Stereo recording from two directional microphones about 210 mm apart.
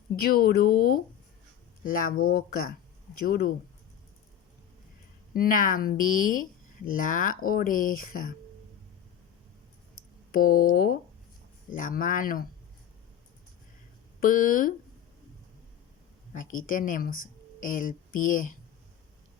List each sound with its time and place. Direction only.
0.2 s speech: 45° left (ahead or behind)
5.3 s speech: 40° left (ahead or behind)
10.3 s speech: 40° left (ahead or behind)
14.2 s speech: 40° left (ahead or behind)
16.3 s speech: 40° left (ahead or behind)